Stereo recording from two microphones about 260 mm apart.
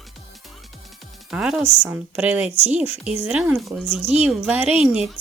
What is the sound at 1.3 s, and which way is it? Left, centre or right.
Speech, centre.